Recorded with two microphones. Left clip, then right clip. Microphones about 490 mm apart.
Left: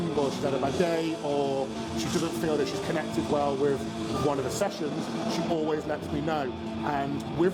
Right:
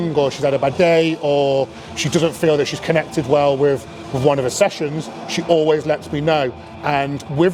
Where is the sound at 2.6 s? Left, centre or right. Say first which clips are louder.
Right 11 dB; right.